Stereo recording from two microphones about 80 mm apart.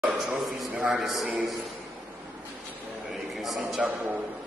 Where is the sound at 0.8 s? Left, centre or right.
Centre.